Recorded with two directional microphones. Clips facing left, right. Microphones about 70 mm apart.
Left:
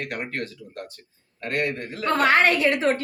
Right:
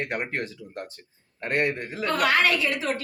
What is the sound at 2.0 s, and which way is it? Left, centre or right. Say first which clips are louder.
Speech: left 3 dB; left.